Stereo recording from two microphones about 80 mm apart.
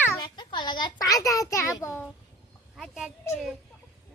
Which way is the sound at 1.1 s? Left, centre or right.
Left.